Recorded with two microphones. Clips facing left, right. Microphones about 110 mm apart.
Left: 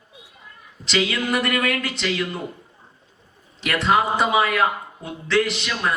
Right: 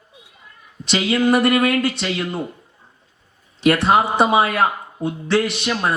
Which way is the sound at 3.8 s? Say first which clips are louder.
Left 1 dB; 25° right (ahead or behind).